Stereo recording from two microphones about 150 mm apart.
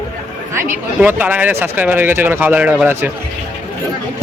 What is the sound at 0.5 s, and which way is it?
Speech, 10° right (ahead or behind).